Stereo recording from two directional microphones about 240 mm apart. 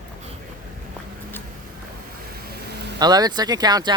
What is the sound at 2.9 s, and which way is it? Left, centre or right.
Speech, centre.